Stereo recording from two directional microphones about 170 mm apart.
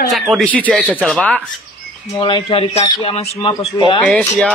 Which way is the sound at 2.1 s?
25° left (ahead or behind).